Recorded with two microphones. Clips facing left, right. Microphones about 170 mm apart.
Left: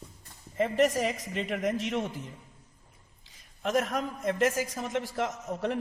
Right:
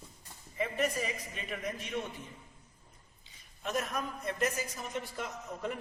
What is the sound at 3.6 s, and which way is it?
A man's voice, 90° left.